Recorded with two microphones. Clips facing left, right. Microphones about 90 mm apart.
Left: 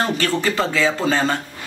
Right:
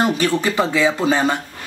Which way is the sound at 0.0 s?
15° right (ahead or behind).